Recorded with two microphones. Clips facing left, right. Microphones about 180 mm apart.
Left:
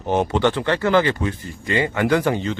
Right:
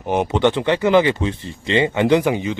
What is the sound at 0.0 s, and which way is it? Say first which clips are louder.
Speech: right 1 dB; 15° right (ahead or behind).